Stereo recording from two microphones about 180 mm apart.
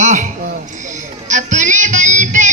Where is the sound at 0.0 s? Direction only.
40° right (ahead or behind).